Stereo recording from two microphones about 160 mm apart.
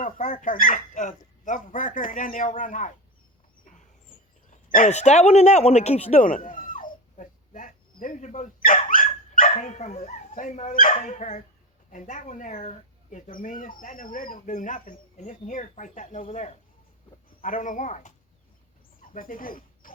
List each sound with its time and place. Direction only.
0.0 s speech: 55° left (ahead or behind)
4.4 s speech: 50° left (ahead or behind)
6.1 s speech: 55° left (ahead or behind)